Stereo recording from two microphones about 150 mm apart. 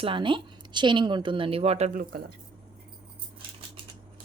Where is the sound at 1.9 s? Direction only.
70° right (ahead or behind).